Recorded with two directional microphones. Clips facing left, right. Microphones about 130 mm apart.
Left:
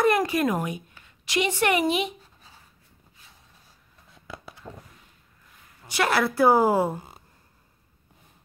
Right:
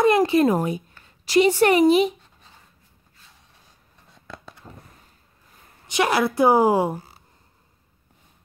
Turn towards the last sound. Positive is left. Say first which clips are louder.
# right 2 dB
turn(degrees=-15)  # may be behind; listen again after turning